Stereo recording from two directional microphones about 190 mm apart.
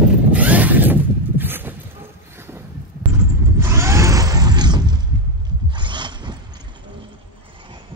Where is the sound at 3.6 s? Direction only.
15° right (ahead or behind).